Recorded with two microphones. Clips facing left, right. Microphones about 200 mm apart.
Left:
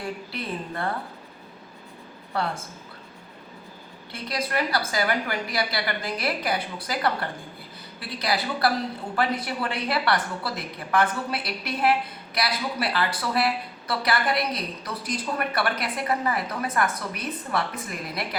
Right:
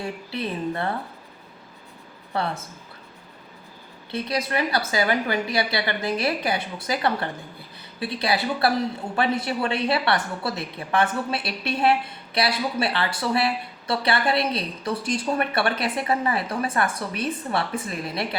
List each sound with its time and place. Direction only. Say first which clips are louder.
0.3 s a woman's voice: right 5 dB; 25° right (ahead or behind)
4.1 s a woman's voice: right 3 dB; 25° right (ahead or behind)